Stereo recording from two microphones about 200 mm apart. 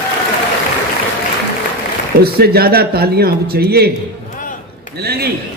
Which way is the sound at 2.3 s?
50° right (ahead or behind).